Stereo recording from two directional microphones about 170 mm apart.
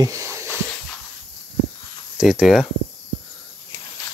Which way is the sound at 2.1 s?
Centre (ahead or behind).